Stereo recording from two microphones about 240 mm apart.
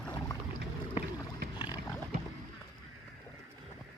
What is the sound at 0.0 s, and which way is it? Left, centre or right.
Boat, centre.